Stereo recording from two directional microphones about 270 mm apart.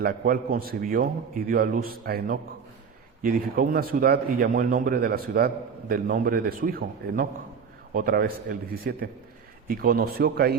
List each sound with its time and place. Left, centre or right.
0.0 s a man's voice: right